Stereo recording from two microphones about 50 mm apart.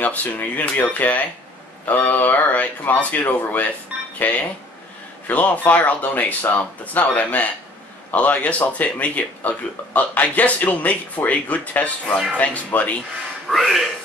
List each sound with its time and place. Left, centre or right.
0.0 s speech: left
13.5 s speech: centre